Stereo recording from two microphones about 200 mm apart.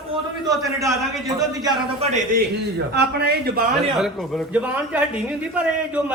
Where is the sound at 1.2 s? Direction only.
20° right (ahead or behind).